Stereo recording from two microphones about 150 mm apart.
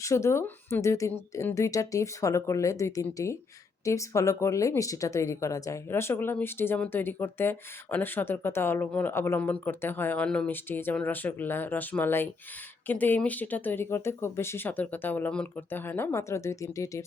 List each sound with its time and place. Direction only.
0.0 s speech: 20° left (ahead or behind)